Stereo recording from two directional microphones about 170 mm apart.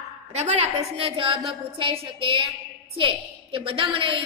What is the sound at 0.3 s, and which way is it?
A woman's voice, 40° right (ahead or behind).